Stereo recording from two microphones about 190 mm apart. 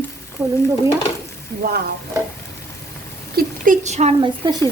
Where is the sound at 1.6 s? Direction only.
55° right (ahead or behind).